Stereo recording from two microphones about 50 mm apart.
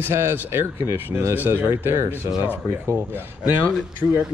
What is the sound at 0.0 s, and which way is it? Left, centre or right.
Speech, right.